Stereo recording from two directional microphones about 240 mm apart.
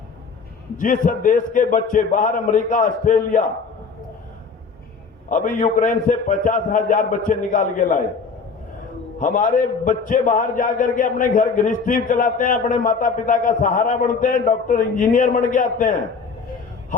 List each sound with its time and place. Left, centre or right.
0.8 s a man's voice: left
5.3 s a man's voice: left
9.1 s a man's voice: left